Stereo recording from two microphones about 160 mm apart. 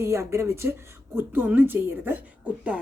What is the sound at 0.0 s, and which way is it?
A woman's voice, 15° right (ahead or behind).